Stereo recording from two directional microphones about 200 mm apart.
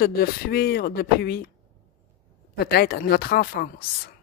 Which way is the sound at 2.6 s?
55° left (ahead or behind).